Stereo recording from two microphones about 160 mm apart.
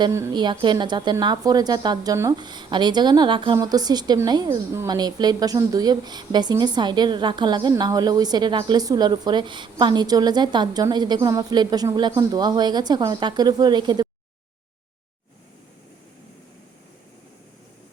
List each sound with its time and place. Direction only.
0.0 s a woman's voice: 20° right (ahead or behind)